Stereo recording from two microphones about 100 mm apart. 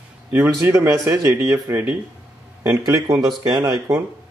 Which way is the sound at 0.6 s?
30° right (ahead or behind).